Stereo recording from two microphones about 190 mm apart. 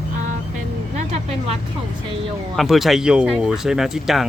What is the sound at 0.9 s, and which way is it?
Vehicle, 35° right (ahead or behind).